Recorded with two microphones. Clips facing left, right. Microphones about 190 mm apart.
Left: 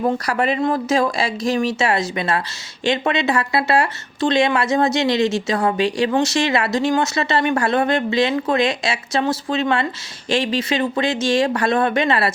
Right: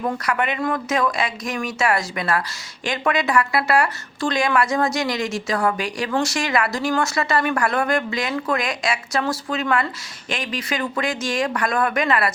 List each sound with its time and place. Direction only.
0.0 s speech: 30° left (ahead or behind)